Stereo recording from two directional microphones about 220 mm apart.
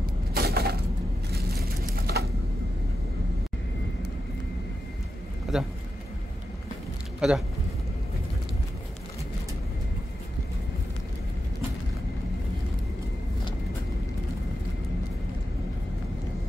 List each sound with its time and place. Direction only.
0.3 s a sound: 45° right (ahead or behind)
5.5 s speech: centre (ahead or behind)
7.2 s speech: 5° right (ahead or behind)